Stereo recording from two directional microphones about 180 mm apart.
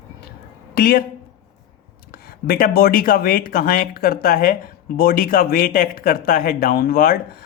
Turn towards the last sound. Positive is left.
turn(degrees=55)  # may be behind; listen again after turning